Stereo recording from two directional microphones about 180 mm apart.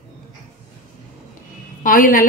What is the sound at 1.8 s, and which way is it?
Speech, 50° left (ahead or behind).